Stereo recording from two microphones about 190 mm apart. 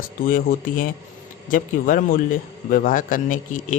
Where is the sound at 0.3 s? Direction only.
45° left (ahead or behind).